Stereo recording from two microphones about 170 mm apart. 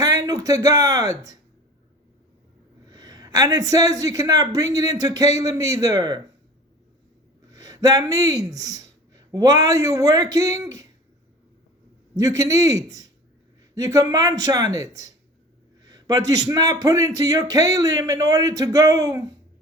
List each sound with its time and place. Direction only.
0.0 s speech: 20° right (ahead or behind)
2.9 s a man's voice: 20° right (ahead or behind)
7.5 s speech: 20° right (ahead or behind)
12.1 s a man's voice: 20° right (ahead or behind)